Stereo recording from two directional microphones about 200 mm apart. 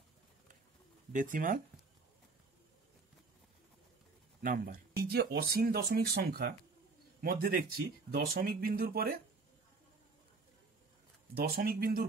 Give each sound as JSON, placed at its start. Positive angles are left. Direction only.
{"t": 1.1, "sound": "speech", "side_deg": -40}
{"t": 4.4, "sound": "speech", "side_deg": -45}
{"t": 11.3, "sound": "speech", "side_deg": -50}